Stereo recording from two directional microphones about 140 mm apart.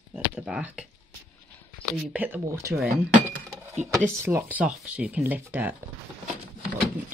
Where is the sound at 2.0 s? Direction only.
10° right (ahead or behind).